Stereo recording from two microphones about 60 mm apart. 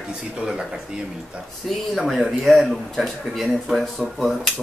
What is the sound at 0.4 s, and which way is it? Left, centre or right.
Speech, centre.